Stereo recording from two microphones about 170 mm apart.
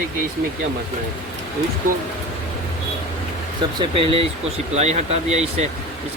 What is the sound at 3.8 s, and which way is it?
Speech, 30° right (ahead or behind).